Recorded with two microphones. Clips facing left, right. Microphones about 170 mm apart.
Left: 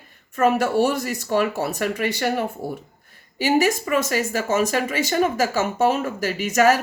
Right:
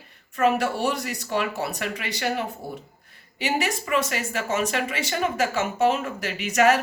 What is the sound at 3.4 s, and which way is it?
Speech, 45° left (ahead or behind).